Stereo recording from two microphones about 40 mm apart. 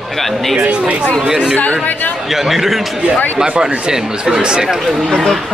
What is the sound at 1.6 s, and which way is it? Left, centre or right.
Speech, left.